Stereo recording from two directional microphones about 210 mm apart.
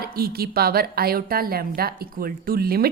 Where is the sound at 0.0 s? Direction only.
45° right (ahead or behind).